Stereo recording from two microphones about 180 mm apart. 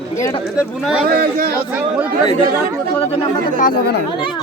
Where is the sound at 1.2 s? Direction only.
60° right (ahead or behind).